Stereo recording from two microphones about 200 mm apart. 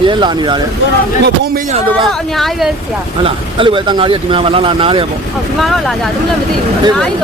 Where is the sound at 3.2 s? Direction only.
25° right (ahead or behind).